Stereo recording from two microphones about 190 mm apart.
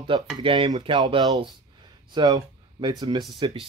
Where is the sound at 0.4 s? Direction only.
30° right (ahead or behind).